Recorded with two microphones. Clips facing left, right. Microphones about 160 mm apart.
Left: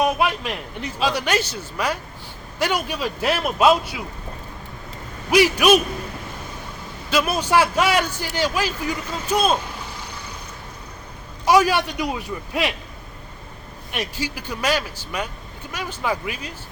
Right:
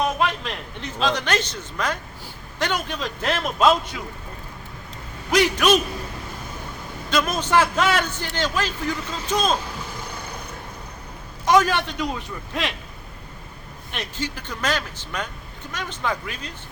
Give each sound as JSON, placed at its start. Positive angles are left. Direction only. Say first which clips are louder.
{"t": 0.0, "sound": "a man's voice", "louder": "left 2 dB", "side_deg": 10}
{"t": 5.3, "sound": "a man's voice", "louder": "left 3 dB", "side_deg": 10}
{"t": 7.1, "sound": "a man's voice", "louder": "left 1 dB", "side_deg": 10}
{"t": 11.4, "sound": "a man's voice", "louder": "left 2 dB", "side_deg": 10}
{"t": 13.9, "sound": "a man's voice", "louder": "left 2 dB", "side_deg": 10}